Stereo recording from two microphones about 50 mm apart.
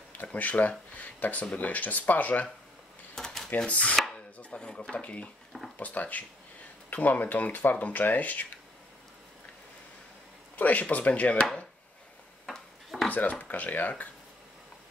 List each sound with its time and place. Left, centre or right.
0.1 s speech: left
3.2 s a sound: centre
3.5 s speech: left
4.1 s chopping: left
4.9 s speech: left
10.5 s speech: left
12.4 s a sound: centre
13.1 s speech: left